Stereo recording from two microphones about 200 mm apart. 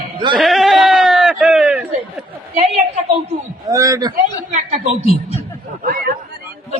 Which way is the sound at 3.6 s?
15° right (ahead or behind).